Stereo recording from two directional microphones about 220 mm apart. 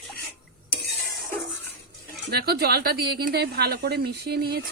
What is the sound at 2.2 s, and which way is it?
A woman's voice, 45° right (ahead or behind).